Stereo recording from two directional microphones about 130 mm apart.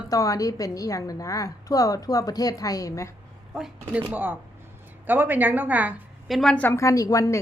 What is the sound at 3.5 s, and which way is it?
Speech, 5° right (ahead or behind).